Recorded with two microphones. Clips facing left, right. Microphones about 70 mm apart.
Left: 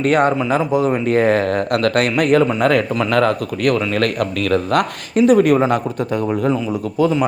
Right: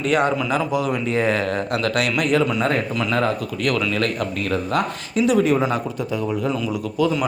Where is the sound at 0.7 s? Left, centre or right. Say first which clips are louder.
Left 5 dB; left.